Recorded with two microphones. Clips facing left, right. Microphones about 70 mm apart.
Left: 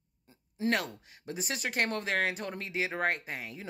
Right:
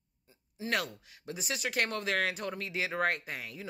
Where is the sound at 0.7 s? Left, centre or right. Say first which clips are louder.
Left 3 dB; left.